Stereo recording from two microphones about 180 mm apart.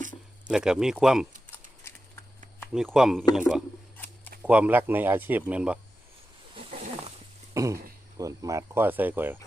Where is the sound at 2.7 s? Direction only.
5° right (ahead or behind).